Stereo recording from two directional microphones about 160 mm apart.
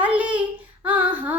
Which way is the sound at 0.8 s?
10° right (ahead or behind).